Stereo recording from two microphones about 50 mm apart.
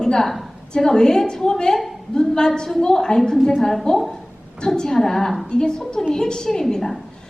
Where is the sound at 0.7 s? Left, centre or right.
Centre.